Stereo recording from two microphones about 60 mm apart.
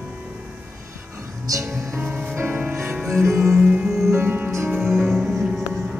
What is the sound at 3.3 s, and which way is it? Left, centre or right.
Music, right.